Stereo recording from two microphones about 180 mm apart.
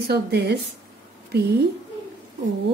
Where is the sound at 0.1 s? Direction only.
65° right (ahead or behind).